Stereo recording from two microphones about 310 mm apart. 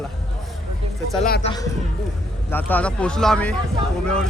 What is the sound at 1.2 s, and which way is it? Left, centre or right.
Speech, left.